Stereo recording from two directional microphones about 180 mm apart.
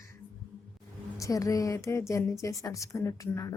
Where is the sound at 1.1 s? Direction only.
20° left (ahead or behind).